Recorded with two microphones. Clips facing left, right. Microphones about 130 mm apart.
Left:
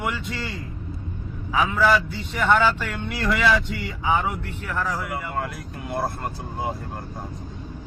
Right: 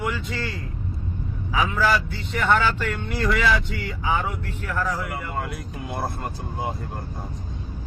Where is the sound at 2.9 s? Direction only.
Centre (ahead or behind).